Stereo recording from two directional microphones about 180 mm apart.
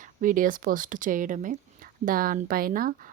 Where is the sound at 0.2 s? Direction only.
50° right (ahead or behind).